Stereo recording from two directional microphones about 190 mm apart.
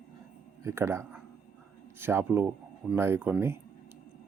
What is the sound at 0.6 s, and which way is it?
Speech, 15° right (ahead or behind).